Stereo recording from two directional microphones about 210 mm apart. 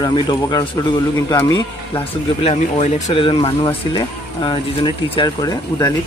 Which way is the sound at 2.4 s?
25° left (ahead or behind).